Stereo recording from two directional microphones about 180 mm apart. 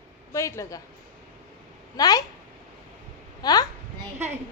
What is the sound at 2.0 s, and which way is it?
Speech, 20° left (ahead or behind).